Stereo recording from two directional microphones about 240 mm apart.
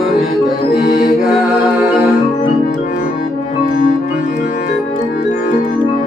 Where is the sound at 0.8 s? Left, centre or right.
Left.